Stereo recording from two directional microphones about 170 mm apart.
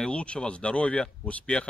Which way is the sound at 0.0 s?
5° left (ahead or behind).